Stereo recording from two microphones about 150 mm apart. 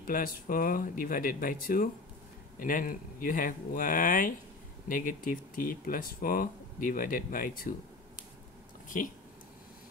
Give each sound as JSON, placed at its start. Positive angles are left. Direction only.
{"t": 0.0, "sound": "speech", "side_deg": 70}
{"t": 8.8, "sound": "speech", "side_deg": 60}